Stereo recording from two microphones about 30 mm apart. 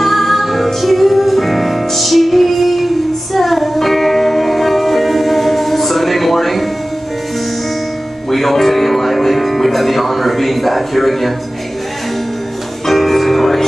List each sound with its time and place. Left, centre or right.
0.0 s music: centre
8.3 s music: centre
12.8 s music: centre